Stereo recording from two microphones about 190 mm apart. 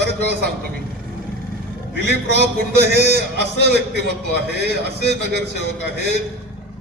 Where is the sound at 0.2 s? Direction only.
60° right (ahead or behind).